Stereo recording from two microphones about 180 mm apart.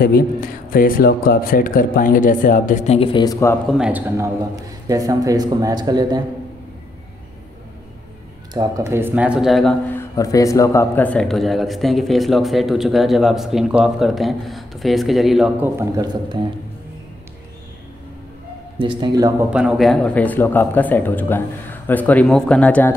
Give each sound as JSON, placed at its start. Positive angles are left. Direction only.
{"t": 0.7, "sound": "speech", "side_deg": 50}
{"t": 3.0, "sound": "speech", "side_deg": 25}
{"t": 3.7, "sound": "speech", "side_deg": -5}
{"t": 4.2, "sound": "a man's voice", "side_deg": -20}
{"t": 8.5, "sound": "speech", "side_deg": -20}
{"t": 16.0, "sound": "a man's voice", "side_deg": -25}
{"t": 18.8, "sound": "a man's voice", "side_deg": -25}
{"t": 19.5, "sound": "speech", "side_deg": 0}